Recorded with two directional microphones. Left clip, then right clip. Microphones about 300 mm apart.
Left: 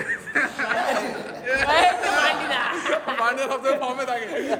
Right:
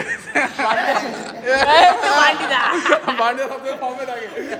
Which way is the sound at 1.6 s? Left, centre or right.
Right.